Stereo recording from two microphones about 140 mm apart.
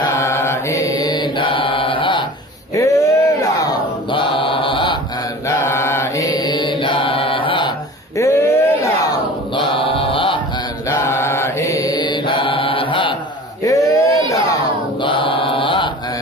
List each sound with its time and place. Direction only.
0.1 s mantra: 20° left (ahead or behind); by 2.2 s 35° left (ahead or behind)
2.7 s a sound: 20° left (ahead or behind)
4.1 s mantra: 35° left (ahead or behind)
5.7 s mantra: 20° left (ahead or behind)
6.2 s mantra: 30° left (ahead or behind)
8.2 s a sound: 20° left (ahead or behind)
9.6 s mantra: 35° left (ahead or behind)
11.1 s mantra: 15° left (ahead or behind); by 13.1 s 40° left (ahead or behind)
13.7 s a sound: 20° left (ahead or behind)
15.0 s mantra: 35° left (ahead or behind)